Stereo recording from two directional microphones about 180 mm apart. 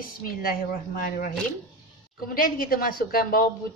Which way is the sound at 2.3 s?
55° left (ahead or behind).